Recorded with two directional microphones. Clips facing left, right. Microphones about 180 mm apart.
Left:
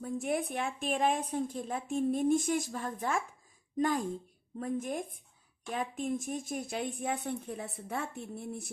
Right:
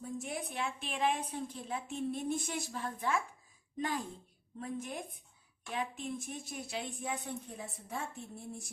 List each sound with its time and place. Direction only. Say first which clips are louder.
0.0 s a woman's voice: left 7 dB; 55° left (ahead or behind)